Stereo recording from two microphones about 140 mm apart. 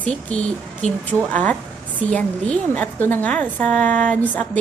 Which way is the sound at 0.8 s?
50° left (ahead or behind).